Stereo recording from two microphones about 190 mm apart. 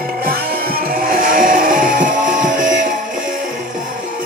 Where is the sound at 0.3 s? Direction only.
50° right (ahead or behind).